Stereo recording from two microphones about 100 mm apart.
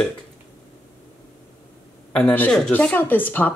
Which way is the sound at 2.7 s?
15° left (ahead or behind).